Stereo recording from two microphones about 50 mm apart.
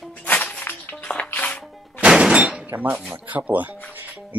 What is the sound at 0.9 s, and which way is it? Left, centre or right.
Music, left.